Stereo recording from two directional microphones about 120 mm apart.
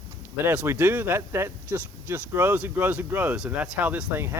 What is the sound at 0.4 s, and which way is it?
Speech, 15° right (ahead or behind).